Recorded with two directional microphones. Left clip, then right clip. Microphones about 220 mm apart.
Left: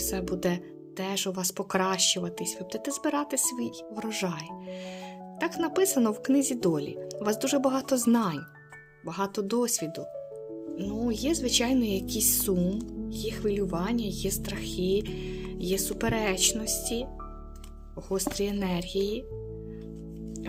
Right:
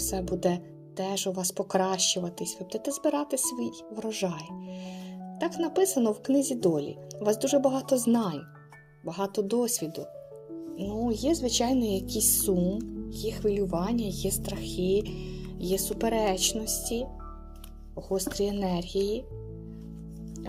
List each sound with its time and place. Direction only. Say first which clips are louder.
0.0 s speech: right 1 dB; 25° left (ahead or behind)
5.4 s speech: even; 25° left (ahead or behind)
9.0 s speech: right 1 dB; 25° left (ahead or behind)
18.2 s speech: right 1 dB; 25° left (ahead or behind)